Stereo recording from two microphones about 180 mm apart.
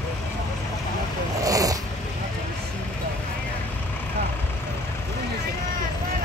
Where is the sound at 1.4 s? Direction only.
20° right (ahead or behind).